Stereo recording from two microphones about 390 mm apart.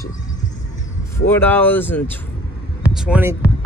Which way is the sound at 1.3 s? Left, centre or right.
Centre.